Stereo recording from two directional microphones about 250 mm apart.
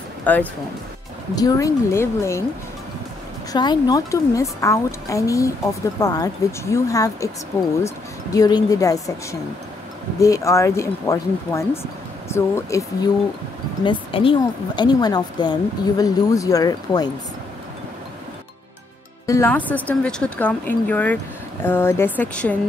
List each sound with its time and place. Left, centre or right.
0.2 s speech: centre
3.5 s speech: centre
19.2 s a woman's voice: centre